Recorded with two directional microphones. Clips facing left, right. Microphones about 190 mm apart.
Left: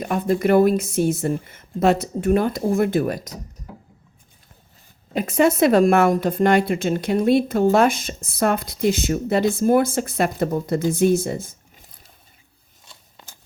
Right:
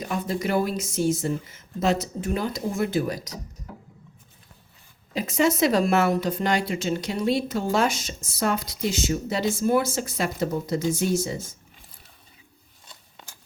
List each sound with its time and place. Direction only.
0.0 s speech: 55° left (ahead or behind)
5.1 s speech: 55° left (ahead or behind)